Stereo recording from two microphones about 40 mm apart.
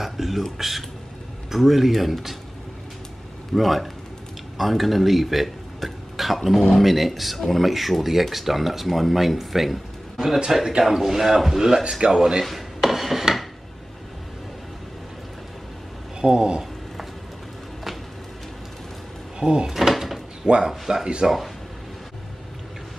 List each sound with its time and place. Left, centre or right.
0.0 s a sound: centre
1.5 s speech: centre
3.5 s a man's voice: centre
12.8 s rub: centre
16.2 s speech: right
19.4 s speech: right
19.9 s door: centre
20.6 s a man's voice: centre